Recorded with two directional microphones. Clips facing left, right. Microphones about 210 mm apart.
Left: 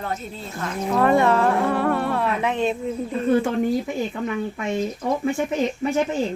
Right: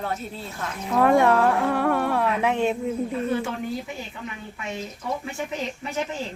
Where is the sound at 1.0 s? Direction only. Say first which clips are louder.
Even; 10° right (ahead or behind).